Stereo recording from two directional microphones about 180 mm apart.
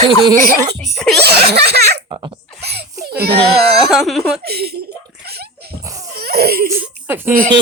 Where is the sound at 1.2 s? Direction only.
65° right (ahead or behind).